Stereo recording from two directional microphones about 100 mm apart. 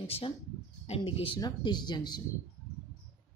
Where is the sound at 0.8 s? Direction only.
75° left (ahead or behind).